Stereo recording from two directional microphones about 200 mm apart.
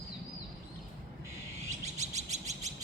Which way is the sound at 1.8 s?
35° right (ahead or behind).